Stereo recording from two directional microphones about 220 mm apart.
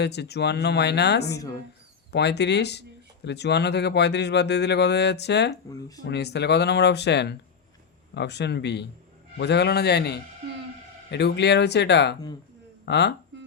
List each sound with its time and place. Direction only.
0.0 s speech: 50° left (ahead or behind)